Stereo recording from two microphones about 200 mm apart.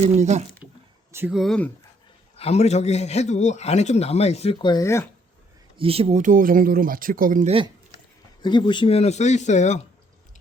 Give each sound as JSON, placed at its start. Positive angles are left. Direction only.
{"t": 0.0, "sound": "speech", "side_deg": -35}
{"t": 1.1, "sound": "speech", "side_deg": -5}
{"t": 2.3, "sound": "a man's voice", "side_deg": 30}
{"t": 5.7, "sound": "speech", "side_deg": -30}
{"t": 7.9, "sound": "speech", "side_deg": 20}